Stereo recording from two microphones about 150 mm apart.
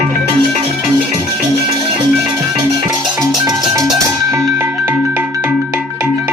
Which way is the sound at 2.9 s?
25° right (ahead or behind).